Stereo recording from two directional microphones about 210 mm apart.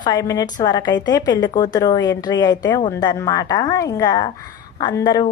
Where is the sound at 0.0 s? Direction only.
20° left (ahead or behind).